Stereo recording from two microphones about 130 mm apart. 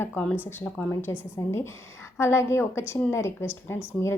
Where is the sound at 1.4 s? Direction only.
20° left (ahead or behind).